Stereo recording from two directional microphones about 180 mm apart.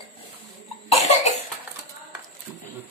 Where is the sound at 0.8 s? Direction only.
35° left (ahead or behind).